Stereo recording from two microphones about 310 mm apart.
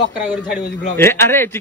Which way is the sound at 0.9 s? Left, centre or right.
Centre.